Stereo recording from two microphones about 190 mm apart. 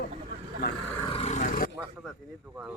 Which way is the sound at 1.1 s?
35° left (ahead or behind).